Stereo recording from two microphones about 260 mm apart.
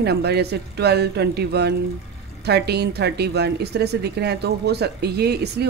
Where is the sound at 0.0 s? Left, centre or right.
Right.